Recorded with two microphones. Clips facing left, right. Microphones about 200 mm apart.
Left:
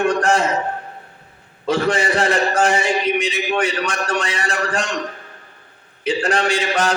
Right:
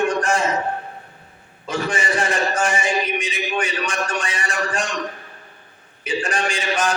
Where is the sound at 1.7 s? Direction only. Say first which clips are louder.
Left 5 dB; 60° left (ahead or behind).